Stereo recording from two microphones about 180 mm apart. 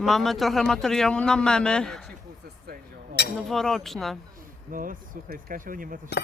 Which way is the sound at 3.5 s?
Centre (ahead or behind).